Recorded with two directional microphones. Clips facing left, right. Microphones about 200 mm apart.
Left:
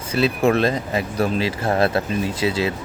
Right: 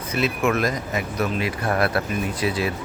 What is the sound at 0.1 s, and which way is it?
Speech, 30° left (ahead or behind).